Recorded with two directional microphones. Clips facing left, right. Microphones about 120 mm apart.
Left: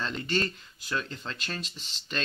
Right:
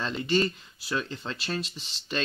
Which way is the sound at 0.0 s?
5° right (ahead or behind).